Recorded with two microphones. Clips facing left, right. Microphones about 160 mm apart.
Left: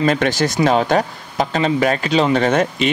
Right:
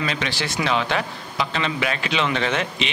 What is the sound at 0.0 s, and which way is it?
Speech, 45° left (ahead or behind).